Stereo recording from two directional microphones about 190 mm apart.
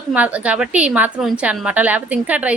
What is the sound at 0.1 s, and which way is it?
A woman's voice, 5° right (ahead or behind).